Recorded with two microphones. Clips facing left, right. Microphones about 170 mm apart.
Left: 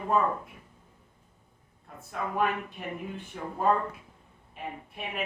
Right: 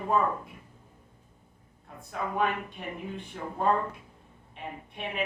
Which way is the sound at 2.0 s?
5° left (ahead or behind).